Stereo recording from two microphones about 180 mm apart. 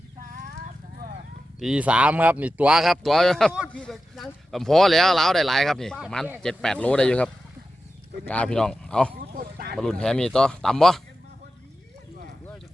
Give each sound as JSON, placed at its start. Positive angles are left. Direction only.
{"t": 1.5, "sound": "speech", "side_deg": -5}
{"t": 8.3, "sound": "speech", "side_deg": 5}
{"t": 9.3, "sound": "a sound", "side_deg": -55}
{"t": 9.7, "sound": "speech", "side_deg": 5}